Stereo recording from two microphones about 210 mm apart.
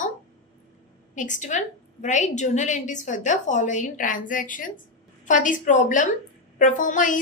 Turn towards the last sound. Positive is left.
turn(degrees=40)  # may be behind; listen again after turning